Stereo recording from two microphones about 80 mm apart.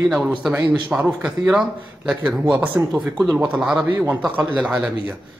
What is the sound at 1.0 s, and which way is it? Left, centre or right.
A man's voice, centre.